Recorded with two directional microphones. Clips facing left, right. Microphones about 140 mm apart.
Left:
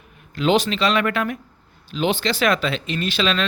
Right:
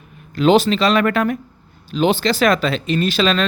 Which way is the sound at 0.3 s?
35° right (ahead or behind).